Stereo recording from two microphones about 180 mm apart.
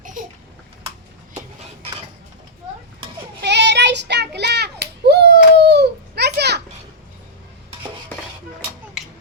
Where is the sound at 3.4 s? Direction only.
75° right (ahead or behind).